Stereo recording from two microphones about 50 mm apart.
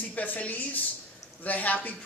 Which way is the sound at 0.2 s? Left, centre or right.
Left.